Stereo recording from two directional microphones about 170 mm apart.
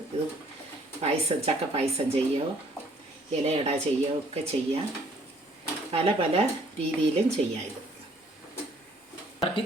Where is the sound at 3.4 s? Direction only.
40° right (ahead or behind).